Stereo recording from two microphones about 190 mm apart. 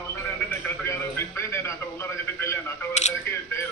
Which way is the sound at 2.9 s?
40° left (ahead or behind).